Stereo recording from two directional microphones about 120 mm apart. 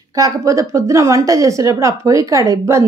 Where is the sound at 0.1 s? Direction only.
30° right (ahead or behind).